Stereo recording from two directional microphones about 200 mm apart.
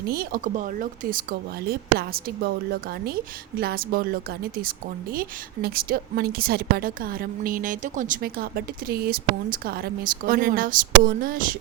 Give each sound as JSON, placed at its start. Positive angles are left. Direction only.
{"t": 0.1, "sound": "a woman's voice", "side_deg": -50}
{"t": 3.6, "sound": "a woman's voice", "side_deg": -50}